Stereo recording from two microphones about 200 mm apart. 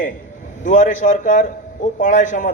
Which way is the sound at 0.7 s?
40° left (ahead or behind).